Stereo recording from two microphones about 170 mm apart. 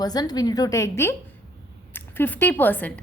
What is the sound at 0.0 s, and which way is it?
A woman's voice, 25° left (ahead or behind).